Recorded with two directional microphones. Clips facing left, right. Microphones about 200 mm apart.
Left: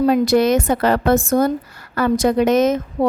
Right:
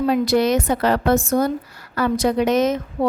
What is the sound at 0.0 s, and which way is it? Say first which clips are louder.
A woman's voice: left 3 dB; 45° left (ahead or behind).